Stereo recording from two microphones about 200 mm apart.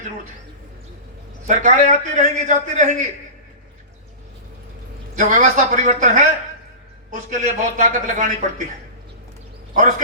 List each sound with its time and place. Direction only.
1.5 s a man's voice: 40° right (ahead or behind)
5.1 s a man's voice: 40° right (ahead or behind)